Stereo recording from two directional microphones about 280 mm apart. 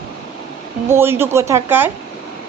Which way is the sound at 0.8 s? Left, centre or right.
Centre.